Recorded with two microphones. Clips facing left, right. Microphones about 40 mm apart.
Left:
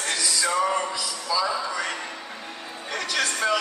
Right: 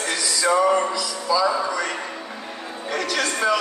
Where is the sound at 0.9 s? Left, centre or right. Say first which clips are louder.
Right 5 dB; centre.